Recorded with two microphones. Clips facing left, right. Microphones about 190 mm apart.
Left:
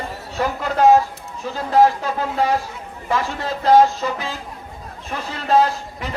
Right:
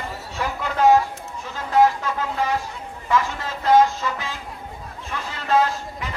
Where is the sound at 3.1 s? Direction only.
35° left (ahead or behind).